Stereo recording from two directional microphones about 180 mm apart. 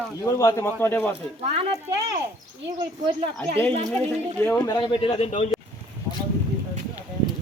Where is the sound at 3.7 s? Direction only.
35° right (ahead or behind).